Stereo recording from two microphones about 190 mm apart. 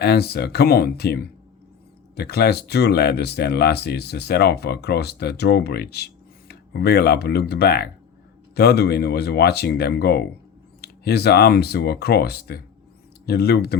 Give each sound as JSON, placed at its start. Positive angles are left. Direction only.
{"t": 0.0, "sound": "speech", "side_deg": 55}